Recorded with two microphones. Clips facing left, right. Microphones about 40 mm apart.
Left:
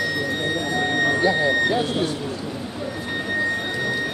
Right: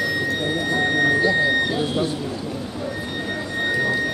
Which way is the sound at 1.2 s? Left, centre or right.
Centre.